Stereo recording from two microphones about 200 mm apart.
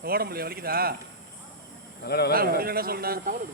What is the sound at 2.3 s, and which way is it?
A man's voice, 50° right (ahead or behind).